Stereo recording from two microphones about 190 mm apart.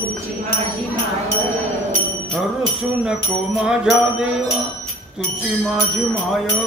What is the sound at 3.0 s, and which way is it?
Bicycle bell, 5° right (ahead or behind).